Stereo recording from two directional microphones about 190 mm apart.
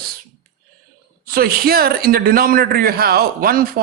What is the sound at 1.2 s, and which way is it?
A man's voice, 50° right (ahead or behind).